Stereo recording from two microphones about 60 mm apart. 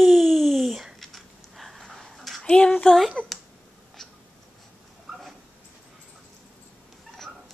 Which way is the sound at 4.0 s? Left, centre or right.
Centre.